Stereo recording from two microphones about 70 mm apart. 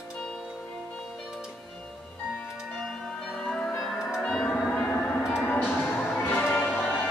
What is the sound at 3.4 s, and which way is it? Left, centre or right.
Music, centre.